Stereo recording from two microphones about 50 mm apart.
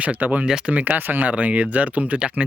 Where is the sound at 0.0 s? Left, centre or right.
Right.